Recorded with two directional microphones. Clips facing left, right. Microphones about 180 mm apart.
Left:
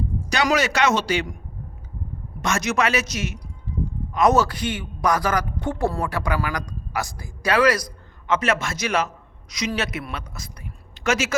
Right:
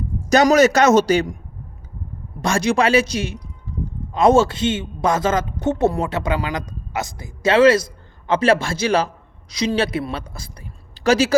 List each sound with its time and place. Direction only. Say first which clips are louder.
0.3 s a man's voice: right 9 dB; 45° right (ahead or behind)
2.4 s a man's voice: right 5 dB; 30° right (ahead or behind)